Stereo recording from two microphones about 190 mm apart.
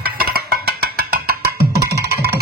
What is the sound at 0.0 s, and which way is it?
Music, 55° right (ahead or behind).